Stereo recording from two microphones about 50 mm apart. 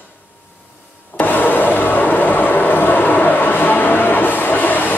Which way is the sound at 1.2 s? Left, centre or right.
Left.